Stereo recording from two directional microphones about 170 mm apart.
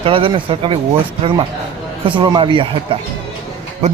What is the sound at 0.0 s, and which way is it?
Speech, 30° right (ahead or behind).